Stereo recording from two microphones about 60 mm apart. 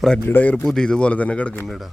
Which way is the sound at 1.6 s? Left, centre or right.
Centre.